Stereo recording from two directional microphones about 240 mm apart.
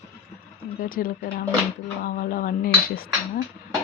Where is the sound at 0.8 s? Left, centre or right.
Left.